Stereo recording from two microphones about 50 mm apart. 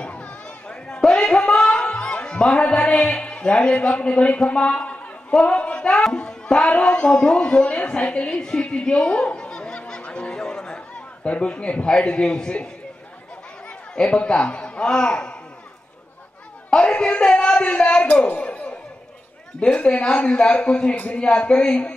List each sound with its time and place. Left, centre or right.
0.0 s chatter: left
0.8 s music: centre
5.4 s speech: left
9.8 s a sound: centre
11.2 s speech: left
13.7 s speech: centre
16.7 s a man's voice: left